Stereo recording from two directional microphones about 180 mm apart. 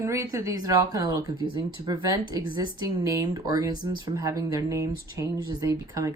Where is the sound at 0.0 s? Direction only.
15° right (ahead or behind).